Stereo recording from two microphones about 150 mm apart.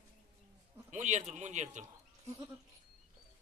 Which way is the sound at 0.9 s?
50° right (ahead or behind).